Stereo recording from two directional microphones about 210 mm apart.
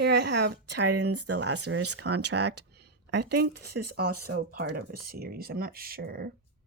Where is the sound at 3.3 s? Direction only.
50° right (ahead or behind).